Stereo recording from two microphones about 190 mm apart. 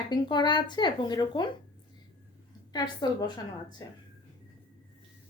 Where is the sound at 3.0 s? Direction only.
20° left (ahead or behind).